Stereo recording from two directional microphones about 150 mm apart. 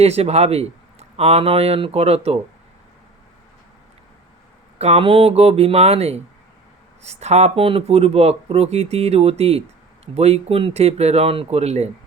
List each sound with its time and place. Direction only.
0.0 s speech: 45° right (ahead or behind)
4.8 s speech: 40° right (ahead or behind)